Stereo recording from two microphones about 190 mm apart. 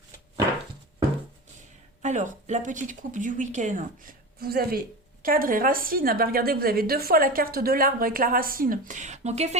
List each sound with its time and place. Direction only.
2.0 s a woman's voice: 40° right (ahead or behind)